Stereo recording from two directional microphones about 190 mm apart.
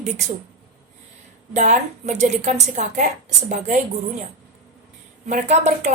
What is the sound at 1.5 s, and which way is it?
A woman's voice, 35° right (ahead or behind).